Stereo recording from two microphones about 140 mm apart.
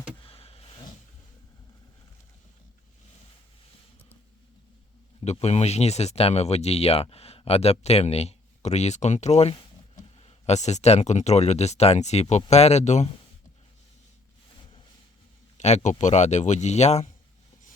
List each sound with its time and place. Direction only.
0.2 s a sound: 45° left (ahead or behind)
5.2 s speech: 50° left (ahead or behind)
15.5 s speech: 55° left (ahead or behind)